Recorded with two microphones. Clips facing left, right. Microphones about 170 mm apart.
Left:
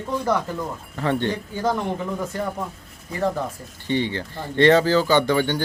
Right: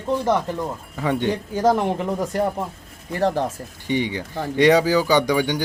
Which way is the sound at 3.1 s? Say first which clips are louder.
Right 3 dB; 70° right (ahead or behind).